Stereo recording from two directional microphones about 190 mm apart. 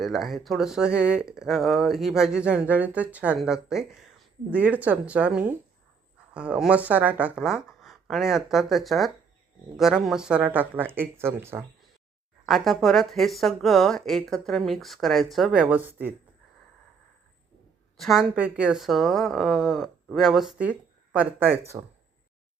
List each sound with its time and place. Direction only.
0.0 s speech: centre (ahead or behind)
12.5 s speech: centre (ahead or behind)
17.9 s speech: centre (ahead or behind)